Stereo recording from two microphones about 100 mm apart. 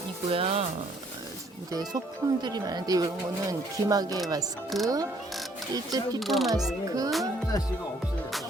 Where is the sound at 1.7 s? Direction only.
40° right (ahead or behind).